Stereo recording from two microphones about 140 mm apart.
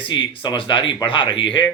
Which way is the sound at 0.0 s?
35° left (ahead or behind).